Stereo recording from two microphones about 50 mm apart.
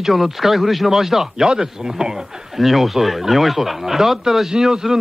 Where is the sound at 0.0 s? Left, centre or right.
Centre.